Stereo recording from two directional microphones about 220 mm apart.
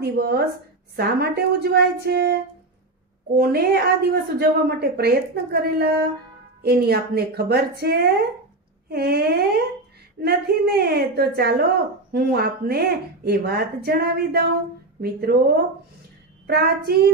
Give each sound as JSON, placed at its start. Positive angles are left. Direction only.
{"t": 0.0, "sound": "a woman's voice", "side_deg": -45}
{"t": 3.3, "sound": "a woman's voice", "side_deg": -45}